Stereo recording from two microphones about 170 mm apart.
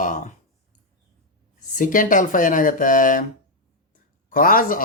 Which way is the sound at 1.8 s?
50° left (ahead or behind).